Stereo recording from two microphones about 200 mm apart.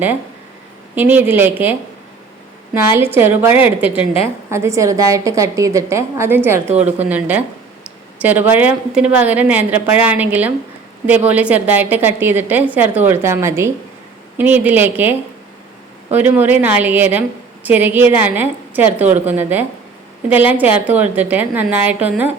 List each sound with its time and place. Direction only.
0.9 s a woman's voice: 10° right (ahead or behind)
2.7 s a woman's voice: 10° right (ahead or behind)